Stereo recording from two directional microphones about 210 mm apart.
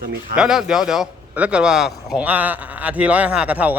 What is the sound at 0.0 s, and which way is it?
Speech, 40° right (ahead or behind).